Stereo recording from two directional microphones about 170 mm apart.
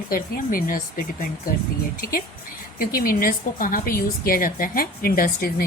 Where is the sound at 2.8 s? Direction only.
60° left (ahead or behind).